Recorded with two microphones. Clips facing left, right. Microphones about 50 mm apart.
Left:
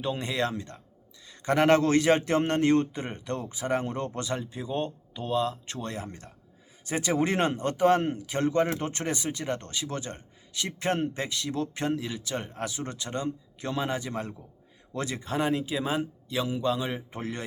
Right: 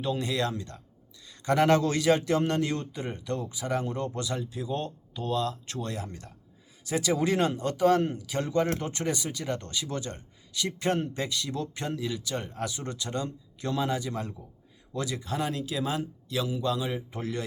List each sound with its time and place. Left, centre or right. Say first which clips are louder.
0.0 s a man's voice: even; left